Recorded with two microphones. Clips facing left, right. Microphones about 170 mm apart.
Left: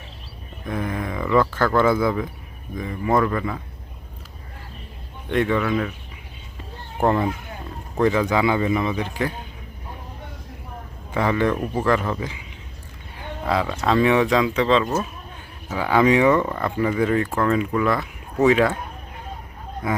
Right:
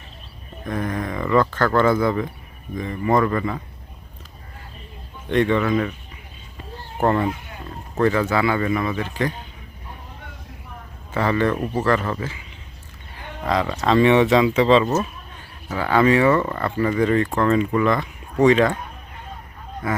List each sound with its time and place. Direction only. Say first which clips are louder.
0.7 s speech: right 1 dB; 5° left (ahead or behind)
5.3 s speech: right 2 dB; 5° left (ahead or behind)
7.0 s speech: even; 10° left (ahead or behind)
11.1 s speech: even; 10° left (ahead or behind)
13.4 s speech: right 1 dB; 5° left (ahead or behind)
15.7 s speech: even; 10° left (ahead or behind)
19.8 s speech: even; 15° left (ahead or behind)